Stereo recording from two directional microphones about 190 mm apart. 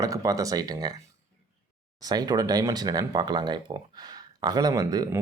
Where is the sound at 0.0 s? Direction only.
15° right (ahead or behind).